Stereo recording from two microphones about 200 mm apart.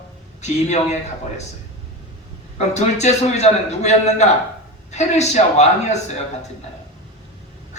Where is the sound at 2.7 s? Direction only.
35° left (ahead or behind).